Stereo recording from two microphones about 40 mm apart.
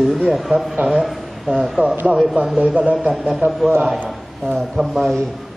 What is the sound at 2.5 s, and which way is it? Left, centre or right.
Speech, right.